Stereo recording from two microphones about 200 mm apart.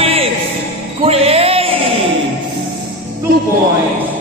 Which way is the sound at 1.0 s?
30° right (ahead or behind).